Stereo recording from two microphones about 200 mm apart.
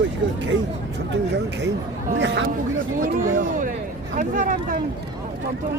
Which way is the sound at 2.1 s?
60° right (ahead or behind).